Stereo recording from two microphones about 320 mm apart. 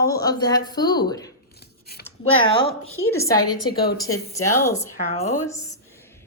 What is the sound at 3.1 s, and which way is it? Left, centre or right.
A woman's voice, centre.